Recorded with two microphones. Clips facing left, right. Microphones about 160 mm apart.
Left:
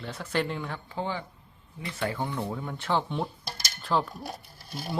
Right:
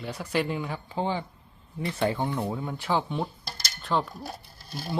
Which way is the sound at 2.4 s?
15° right (ahead or behind).